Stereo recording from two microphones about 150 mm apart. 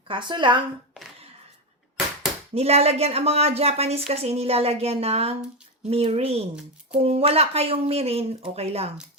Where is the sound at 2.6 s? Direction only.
45° right (ahead or behind).